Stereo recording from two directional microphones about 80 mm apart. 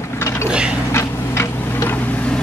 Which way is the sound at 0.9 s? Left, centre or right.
Left.